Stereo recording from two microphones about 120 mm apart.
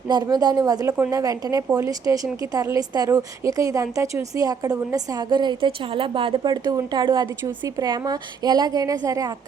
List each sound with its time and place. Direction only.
0.1 s a woman's voice: 35° right (ahead or behind)